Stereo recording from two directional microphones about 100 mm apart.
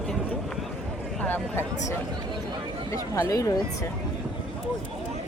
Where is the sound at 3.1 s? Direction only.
35° left (ahead or behind).